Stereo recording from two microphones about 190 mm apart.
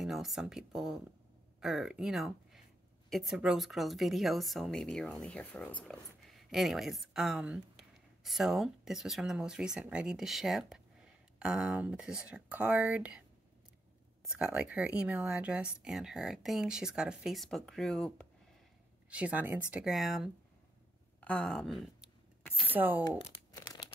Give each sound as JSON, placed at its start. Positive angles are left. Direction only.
{"t": 0.0, "sound": "speech", "side_deg": 0}
{"t": 14.3, "sound": "speech", "side_deg": -5}
{"t": 19.0, "sound": "speech", "side_deg": -5}
{"t": 23.0, "sound": "crumpling", "side_deg": 20}